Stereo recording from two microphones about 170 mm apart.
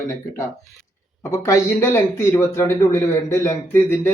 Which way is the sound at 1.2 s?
15° left (ahead or behind).